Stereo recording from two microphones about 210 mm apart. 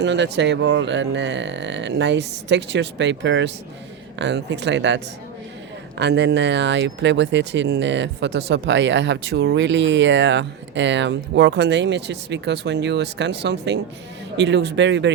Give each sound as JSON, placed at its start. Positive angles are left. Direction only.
{"t": 0.0, "sound": "speech", "side_deg": -55}